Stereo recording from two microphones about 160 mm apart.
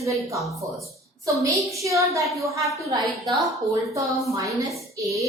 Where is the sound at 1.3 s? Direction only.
20° right (ahead or behind).